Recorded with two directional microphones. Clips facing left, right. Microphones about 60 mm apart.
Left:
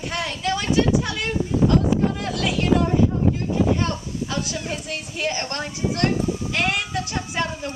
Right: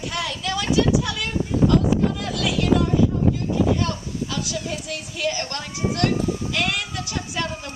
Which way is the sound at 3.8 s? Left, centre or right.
Left.